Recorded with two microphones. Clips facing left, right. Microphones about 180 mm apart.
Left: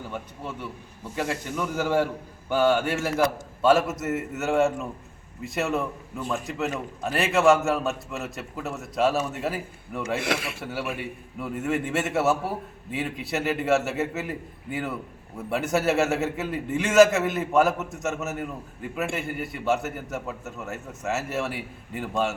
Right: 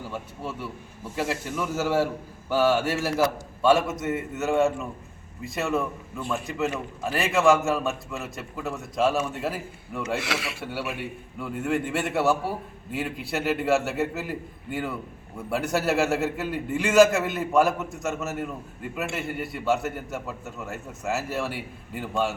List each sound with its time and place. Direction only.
0.1 s a man's voice: 5° right (ahead or behind)
10.2 s speech: 50° left (ahead or behind)
10.6 s a man's voice: centre (ahead or behind)